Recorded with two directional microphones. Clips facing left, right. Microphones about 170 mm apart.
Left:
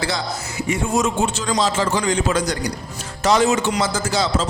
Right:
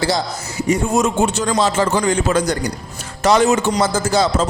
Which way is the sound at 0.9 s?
55° right (ahead or behind).